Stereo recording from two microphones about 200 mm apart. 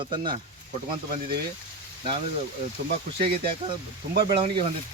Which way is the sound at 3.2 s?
25° right (ahead or behind).